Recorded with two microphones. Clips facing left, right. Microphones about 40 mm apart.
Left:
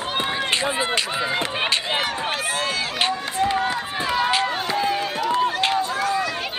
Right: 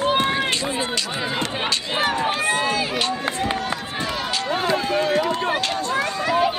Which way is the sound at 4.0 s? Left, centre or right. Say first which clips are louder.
Left 6 dB; centre.